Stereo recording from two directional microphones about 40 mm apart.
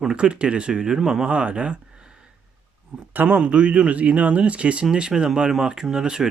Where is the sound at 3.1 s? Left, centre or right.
Right.